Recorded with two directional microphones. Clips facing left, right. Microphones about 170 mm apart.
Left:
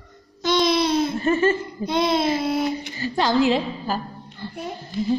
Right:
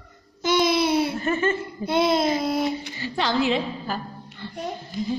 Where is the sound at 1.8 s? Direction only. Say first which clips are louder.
Right 1 dB; 5° right (ahead or behind).